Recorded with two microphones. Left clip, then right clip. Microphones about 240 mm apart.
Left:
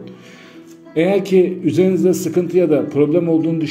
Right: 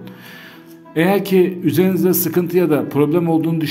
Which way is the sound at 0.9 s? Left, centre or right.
Right.